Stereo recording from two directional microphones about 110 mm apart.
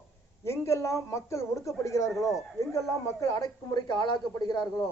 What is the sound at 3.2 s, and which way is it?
Speech, 30° left (ahead or behind).